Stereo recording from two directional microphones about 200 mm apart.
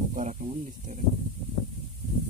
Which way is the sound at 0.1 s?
40° right (ahead or behind).